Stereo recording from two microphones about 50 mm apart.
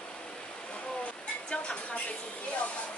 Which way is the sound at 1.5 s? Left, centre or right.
Left.